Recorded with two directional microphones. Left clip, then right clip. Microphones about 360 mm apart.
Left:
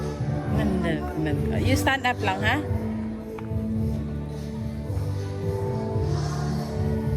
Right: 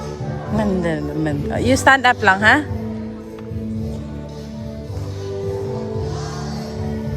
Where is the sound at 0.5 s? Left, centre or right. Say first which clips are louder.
Right 7 dB; right.